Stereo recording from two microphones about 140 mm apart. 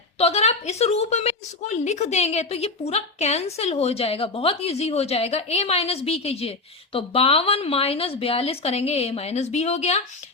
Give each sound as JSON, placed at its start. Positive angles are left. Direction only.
{"t": 0.2, "sound": "a woman's voice", "side_deg": 50}